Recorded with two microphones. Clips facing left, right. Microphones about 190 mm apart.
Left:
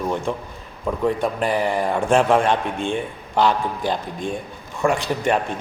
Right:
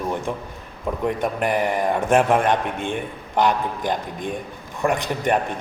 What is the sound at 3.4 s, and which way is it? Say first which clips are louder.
Speech: left 1 dB; 15° right (ahead or behind).